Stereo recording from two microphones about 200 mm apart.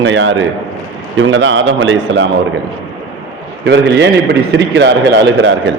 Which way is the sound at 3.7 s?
60° right (ahead or behind).